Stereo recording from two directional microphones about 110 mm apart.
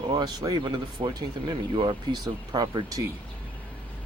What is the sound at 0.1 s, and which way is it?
Speech, 40° right (ahead or behind).